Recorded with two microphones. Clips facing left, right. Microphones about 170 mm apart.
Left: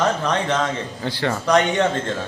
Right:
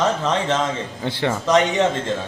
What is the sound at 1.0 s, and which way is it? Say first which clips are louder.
Speech: right 1 dB; 20° right (ahead or behind).